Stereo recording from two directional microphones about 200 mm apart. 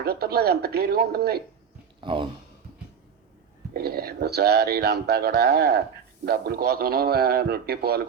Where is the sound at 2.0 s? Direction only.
25° right (ahead or behind).